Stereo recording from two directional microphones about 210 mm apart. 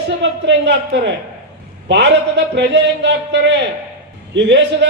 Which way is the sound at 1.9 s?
55° right (ahead or behind).